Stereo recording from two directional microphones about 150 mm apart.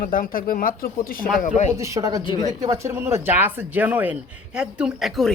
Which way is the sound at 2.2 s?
35° left (ahead or behind).